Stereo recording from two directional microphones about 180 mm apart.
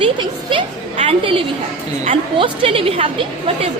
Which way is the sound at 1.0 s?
30° right (ahead or behind).